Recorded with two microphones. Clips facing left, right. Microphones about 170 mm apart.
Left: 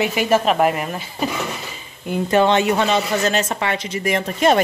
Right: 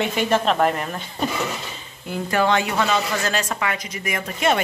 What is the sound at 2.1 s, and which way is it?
A woman's voice, 25° left (ahead or behind).